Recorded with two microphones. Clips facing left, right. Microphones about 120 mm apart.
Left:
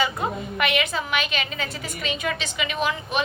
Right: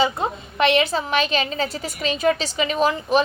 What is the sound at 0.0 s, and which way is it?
A woman's voice, 25° right (ahead or behind).